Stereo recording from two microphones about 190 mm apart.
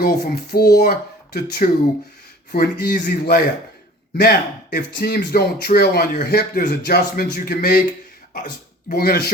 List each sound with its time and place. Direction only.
0.0 s speech: 55° left (ahead or behind)
8.9 s speech: 50° left (ahead or behind)